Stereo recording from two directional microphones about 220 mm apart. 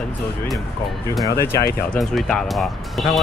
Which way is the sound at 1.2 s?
10° left (ahead or behind).